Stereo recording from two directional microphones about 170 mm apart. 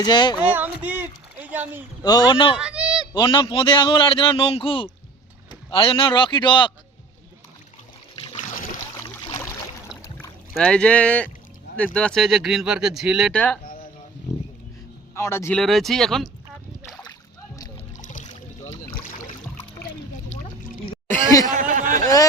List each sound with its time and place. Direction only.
0.0 s speech: 25° left (ahead or behind)
0.3 s a sound: 10° right (ahead or behind)
2.0 s speech: 25° left (ahead or behind)
2.6 s a sound: 5° right (ahead or behind)
3.2 s a man's voice: 30° left (ahead or behind)
8.1 s boat: 35° left (ahead or behind)
8.4 s boat: 55° left (ahead or behind)
9.0 s boat: 30° left (ahead or behind)
10.6 s speech: 5° left (ahead or behind)
15.1 s speech: 15° left (ahead or behind)
15.5 s speech: centre (ahead or behind)
17.9 s boat: 50° left (ahead or behind)
21.4 s a sound: 50° right (ahead or behind)
22.0 s a sound: 20° left (ahead or behind)